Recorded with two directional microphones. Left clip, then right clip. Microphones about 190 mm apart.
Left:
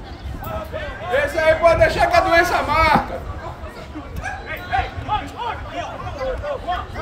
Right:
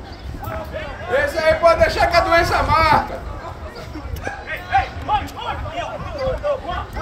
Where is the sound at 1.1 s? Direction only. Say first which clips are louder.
Even; centre (ahead or behind).